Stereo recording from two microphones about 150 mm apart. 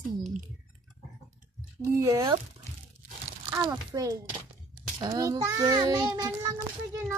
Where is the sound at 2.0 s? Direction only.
20° right (ahead or behind).